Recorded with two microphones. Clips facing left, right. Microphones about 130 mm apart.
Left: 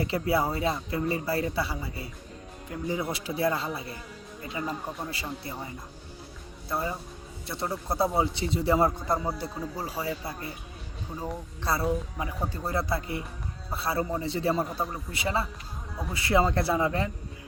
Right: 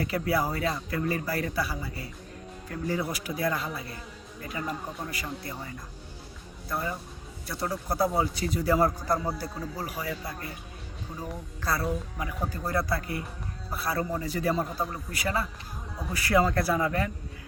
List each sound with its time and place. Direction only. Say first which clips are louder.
0.0 s a man's voice: left 1 dB; 25° left (ahead or behind)
6.7 s a man's voice: left 1 dB; 25° left (ahead or behind)
14.5 s speech: left 1 dB; centre (ahead or behind)
15.1 s a man's voice: left 1 dB; 25° left (ahead or behind)